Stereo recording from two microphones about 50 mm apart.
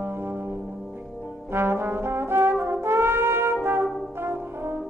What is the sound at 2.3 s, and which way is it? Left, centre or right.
Brass instrument, right.